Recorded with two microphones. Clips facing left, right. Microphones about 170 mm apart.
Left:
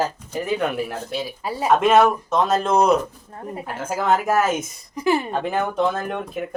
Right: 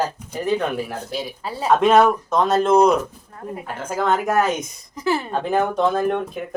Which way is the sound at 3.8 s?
5° left (ahead or behind).